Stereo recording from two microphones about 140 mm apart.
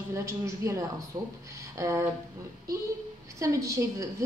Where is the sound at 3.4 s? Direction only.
20° right (ahead or behind).